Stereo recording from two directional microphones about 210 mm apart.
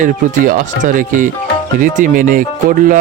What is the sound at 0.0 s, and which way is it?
Speech, 40° right (ahead or behind).